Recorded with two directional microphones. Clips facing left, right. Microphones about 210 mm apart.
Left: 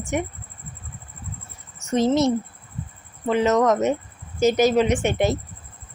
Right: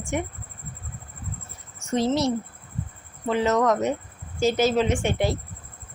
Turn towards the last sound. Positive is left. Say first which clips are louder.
# left 3 dB
turn(degrees=20)  # may be behind; listen again after turning